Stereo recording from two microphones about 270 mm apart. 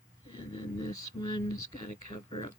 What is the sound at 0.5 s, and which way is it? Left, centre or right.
Speech, left.